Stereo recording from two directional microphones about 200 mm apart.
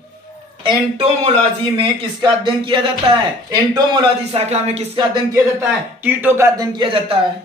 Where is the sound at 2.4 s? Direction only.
25° right (ahead or behind).